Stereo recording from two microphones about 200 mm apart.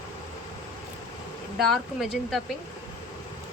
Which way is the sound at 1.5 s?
Centre (ahead or behind).